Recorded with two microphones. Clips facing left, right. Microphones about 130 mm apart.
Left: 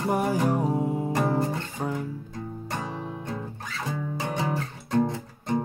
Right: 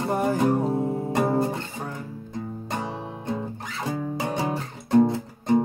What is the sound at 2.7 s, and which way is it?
Music, 20° right (ahead or behind).